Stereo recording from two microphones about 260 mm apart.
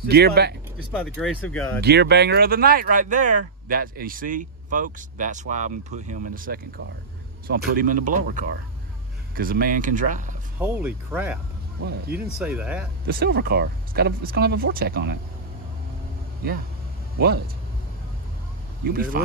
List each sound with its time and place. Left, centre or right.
0.1 s speech: right
1.0 s speech: centre
1.8 s speech: right
10.6 s speech: centre
12.4 s speech: centre
13.0 s speech: right
18.9 s speech: right